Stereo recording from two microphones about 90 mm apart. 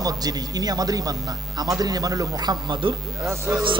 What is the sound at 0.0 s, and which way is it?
A man's voice, 45° right (ahead or behind).